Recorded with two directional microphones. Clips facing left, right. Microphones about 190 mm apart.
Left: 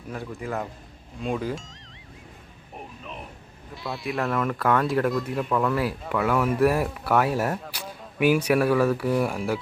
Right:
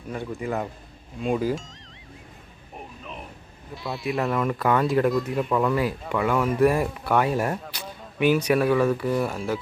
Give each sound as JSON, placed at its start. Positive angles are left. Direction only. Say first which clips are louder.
{"t": 0.1, "sound": "speech", "louder": "right 3 dB", "side_deg": 0}
{"t": 2.7, "sound": "a sound", "louder": "even", "side_deg": 0}
{"t": 3.8, "sound": "speech", "louder": "right 2 dB", "side_deg": 0}